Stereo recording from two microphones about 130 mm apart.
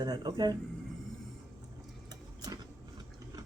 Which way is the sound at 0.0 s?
30° right (ahead or behind).